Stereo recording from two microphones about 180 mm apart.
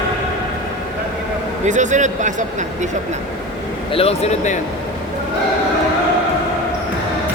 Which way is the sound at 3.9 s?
35° left (ahead or behind).